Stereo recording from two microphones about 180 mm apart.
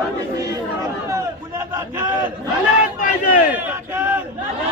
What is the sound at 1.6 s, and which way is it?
Speech, 15° right (ahead or behind).